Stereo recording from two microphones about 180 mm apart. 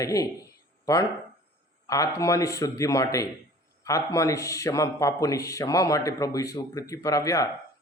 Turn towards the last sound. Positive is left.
turn(degrees=20)  # may be behind; listen again after turning